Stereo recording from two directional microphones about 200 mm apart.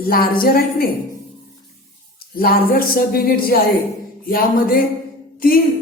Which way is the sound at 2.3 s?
50° left (ahead or behind).